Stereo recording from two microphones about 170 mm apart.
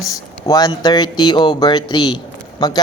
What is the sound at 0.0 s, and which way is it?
Speech, 20° left (ahead or behind).